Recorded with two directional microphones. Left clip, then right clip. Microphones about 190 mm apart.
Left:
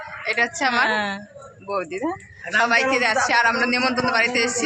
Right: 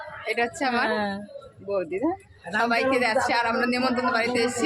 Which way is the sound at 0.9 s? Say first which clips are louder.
Left 4 dB; 20° right (ahead or behind).